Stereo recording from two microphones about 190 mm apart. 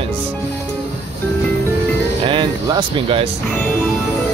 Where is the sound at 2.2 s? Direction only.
25° right (ahead or behind).